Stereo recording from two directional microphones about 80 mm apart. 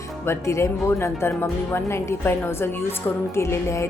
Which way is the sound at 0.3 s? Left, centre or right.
Left.